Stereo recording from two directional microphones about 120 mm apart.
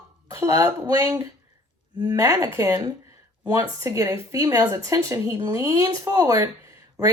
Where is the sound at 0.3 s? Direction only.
30° right (ahead or behind).